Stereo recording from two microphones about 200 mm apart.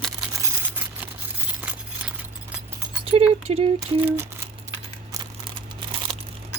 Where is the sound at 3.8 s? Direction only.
10° right (ahead or behind).